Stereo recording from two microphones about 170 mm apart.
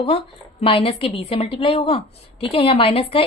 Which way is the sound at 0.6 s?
35° left (ahead or behind).